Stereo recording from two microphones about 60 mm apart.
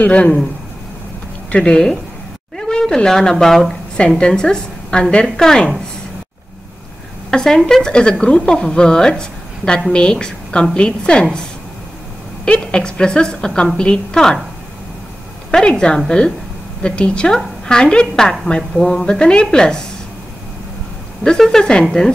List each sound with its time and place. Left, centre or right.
0.0 s speech: left
1.5 s a woman's voice: centre
7.2 s a woman's voice: centre
12.4 s a woman's voice: centre
15.5 s a woman's voice: centre
19.0 s a woman's voice: centre
21.2 s a woman's voice: centre